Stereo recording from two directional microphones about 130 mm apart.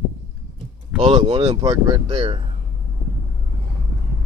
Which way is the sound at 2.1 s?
45° right (ahead or behind).